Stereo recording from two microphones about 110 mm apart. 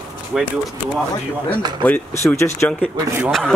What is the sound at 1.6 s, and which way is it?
Speech, 40° right (ahead or behind).